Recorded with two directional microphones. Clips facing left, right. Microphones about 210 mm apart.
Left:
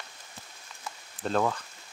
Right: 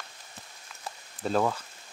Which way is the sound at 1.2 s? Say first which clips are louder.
Right 1 dB; 5° right (ahead or behind).